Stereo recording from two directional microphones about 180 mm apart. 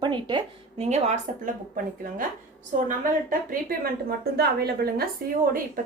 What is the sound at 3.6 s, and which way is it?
A woman's voice, 55° right (ahead or behind).